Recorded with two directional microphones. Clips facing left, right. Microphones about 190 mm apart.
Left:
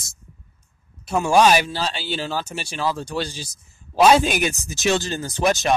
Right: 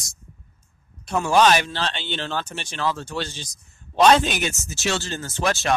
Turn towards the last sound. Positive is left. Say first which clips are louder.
# left 3 dB
turn(degrees=15)  # may be behind; listen again after turning